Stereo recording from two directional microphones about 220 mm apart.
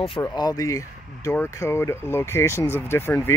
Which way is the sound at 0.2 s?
15° left (ahead or behind).